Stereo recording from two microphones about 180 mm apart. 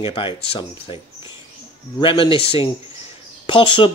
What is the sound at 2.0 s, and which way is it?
Speech, 30° left (ahead or behind).